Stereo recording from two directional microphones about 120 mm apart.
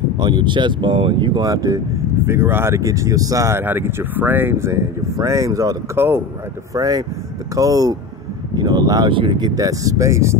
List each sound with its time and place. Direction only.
0.2 s speech: 40° right (ahead or behind)
9.6 s speech: 30° right (ahead or behind)